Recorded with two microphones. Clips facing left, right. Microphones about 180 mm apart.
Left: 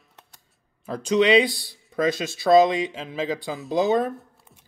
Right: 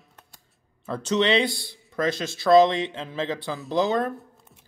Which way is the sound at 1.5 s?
50° right (ahead or behind).